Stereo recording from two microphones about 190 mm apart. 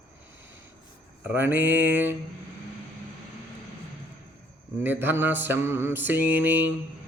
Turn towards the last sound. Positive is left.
turn(degrees=-10)  # may be behind; listen again after turning